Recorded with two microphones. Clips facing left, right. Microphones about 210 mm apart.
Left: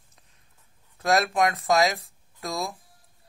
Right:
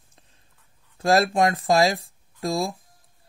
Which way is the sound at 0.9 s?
30° right (ahead or behind).